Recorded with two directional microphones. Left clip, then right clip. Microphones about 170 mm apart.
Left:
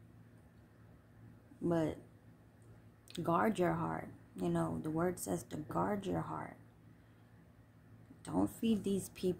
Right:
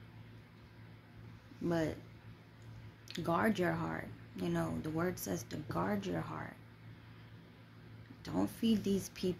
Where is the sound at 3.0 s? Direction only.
30° left (ahead or behind).